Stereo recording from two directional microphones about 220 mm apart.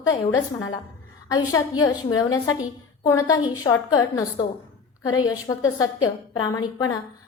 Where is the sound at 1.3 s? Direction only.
15° left (ahead or behind).